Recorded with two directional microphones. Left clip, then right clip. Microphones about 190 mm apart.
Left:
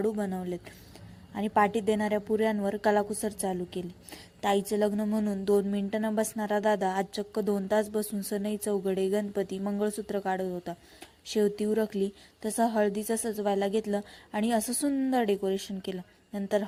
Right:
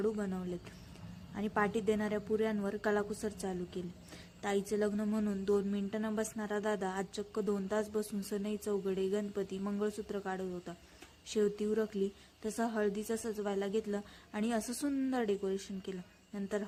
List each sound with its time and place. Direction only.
0.0 s a woman's voice: 25° left (ahead or behind)